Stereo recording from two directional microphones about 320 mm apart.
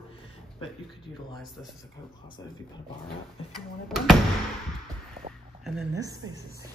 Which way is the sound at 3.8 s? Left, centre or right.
Centre.